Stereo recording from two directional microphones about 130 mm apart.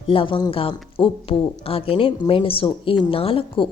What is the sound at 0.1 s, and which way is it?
A woman's voice, 40° left (ahead or behind).